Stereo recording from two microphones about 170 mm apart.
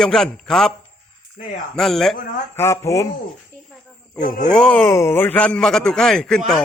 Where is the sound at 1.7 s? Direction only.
Centre (ahead or behind).